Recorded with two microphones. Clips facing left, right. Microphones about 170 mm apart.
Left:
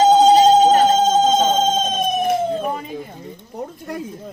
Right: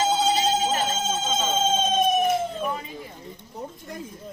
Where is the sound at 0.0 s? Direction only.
35° left (ahead or behind).